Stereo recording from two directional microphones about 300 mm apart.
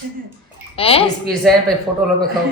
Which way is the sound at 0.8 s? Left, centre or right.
Centre.